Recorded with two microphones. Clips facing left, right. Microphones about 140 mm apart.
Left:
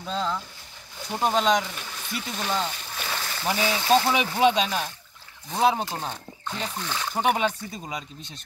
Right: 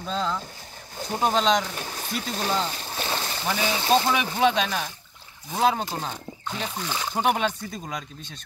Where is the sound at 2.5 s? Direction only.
30° right (ahead or behind).